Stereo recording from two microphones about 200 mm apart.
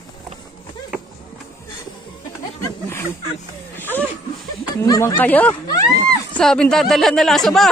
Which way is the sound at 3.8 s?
10° left (ahead or behind).